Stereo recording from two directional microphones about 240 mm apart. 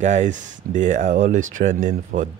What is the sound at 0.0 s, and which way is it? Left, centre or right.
Speech, right.